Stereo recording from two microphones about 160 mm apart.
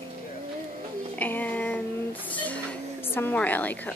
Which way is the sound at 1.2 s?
10° left (ahead or behind).